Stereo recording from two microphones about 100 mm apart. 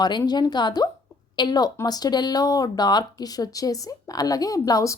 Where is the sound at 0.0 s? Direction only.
45° left (ahead or behind).